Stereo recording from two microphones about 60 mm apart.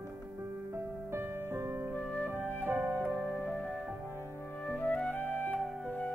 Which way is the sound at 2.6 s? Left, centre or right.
Right.